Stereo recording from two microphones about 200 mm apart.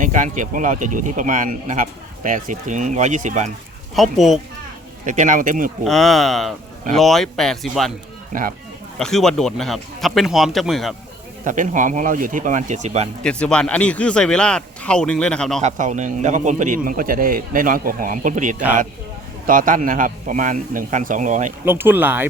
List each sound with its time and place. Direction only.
0.0 s speech: 40° right (ahead or behind)
3.9 s speech: centre (ahead or behind)
5.0 s speech: 40° right (ahead or behind)
5.8 s speech: centre (ahead or behind)
8.3 s speech: 45° right (ahead or behind)
9.0 s speech: 5° left (ahead or behind)
11.4 s speech: 40° right (ahead or behind)
13.2 s speech: 5° left (ahead or behind)
15.6 s speech: 35° right (ahead or behind)
21.6 s speech: 10° right (ahead or behind)